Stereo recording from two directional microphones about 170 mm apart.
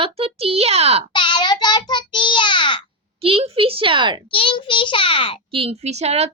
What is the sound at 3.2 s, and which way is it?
A woman's voice, 35° right (ahead or behind).